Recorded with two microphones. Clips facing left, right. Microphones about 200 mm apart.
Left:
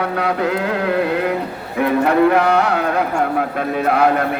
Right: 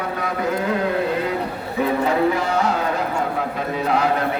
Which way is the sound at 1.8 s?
65° left (ahead or behind).